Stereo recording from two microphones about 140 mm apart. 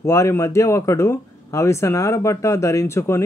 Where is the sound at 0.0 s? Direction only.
20° left (ahead or behind).